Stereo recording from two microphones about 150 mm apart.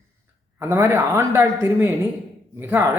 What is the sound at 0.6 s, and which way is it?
A man's voice, 15° right (ahead or behind).